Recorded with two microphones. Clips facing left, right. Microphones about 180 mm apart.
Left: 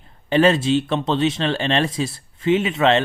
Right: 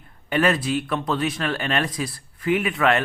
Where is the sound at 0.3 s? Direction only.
25° left (ahead or behind).